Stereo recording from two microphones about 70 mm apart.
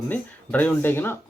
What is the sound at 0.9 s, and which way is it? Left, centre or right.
Speech, left.